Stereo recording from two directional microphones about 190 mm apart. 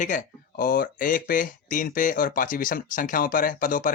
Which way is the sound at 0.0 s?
45° left (ahead or behind).